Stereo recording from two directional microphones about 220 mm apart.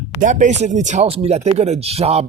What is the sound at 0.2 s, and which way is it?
Speech, 35° right (ahead or behind).